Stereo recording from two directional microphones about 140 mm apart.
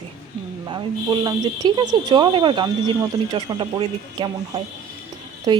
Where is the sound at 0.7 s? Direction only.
30° right (ahead or behind).